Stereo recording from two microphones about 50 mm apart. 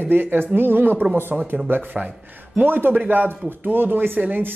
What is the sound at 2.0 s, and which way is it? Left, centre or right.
A man's voice, right.